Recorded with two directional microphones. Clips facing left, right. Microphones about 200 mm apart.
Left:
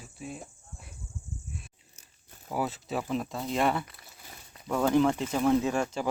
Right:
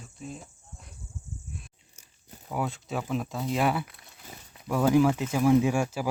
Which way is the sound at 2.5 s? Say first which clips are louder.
Even; centre (ahead or behind).